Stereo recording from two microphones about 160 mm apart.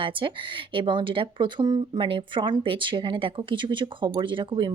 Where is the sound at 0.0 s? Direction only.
30° right (ahead or behind).